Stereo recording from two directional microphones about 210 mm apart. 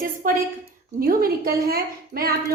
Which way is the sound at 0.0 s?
40° right (ahead or behind).